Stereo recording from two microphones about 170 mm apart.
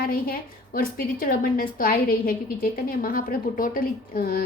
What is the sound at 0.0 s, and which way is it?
A woman's voice, 60° left (ahead or behind).